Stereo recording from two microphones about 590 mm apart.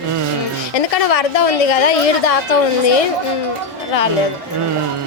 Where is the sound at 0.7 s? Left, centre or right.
Left.